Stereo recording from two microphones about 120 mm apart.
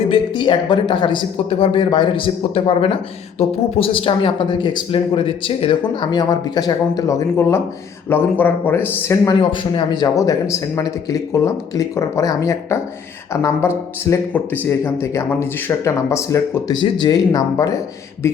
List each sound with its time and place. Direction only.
0.1 s speech: 45° left (ahead or behind); by 8.9 s 15° left (ahead or behind)
9.4 s a man's voice: 40° left (ahead or behind); by 16.7 s 25° left (ahead or behind)
16.8 s speech: 35° left (ahead or behind)